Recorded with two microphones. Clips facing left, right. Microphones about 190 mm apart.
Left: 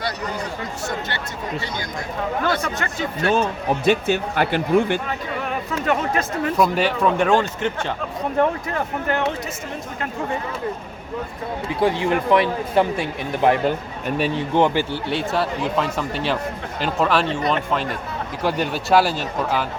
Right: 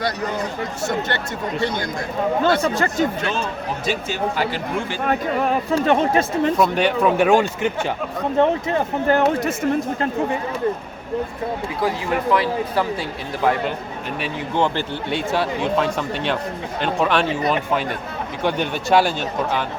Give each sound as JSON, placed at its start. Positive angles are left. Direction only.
{"t": 2.4, "sound": "speech", "side_deg": -30}
{"t": 3.8, "sound": "speech", "side_deg": 60}
{"t": 5.5, "sound": "speech", "side_deg": -35}
{"t": 6.6, "sound": "speech", "side_deg": 0}
{"t": 8.4, "sound": "speech", "side_deg": -25}
{"t": 11.8, "sound": "a man's voice", "side_deg": 25}
{"t": 15.1, "sound": "speech", "side_deg": 0}